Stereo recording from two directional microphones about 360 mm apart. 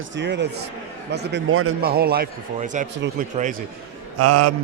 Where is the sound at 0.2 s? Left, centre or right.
Right.